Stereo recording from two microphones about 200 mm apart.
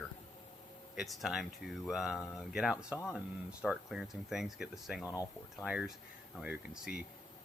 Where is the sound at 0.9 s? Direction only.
Centre (ahead or behind).